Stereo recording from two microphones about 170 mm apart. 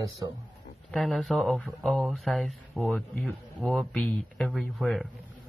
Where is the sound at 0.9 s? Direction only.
Centre (ahead or behind).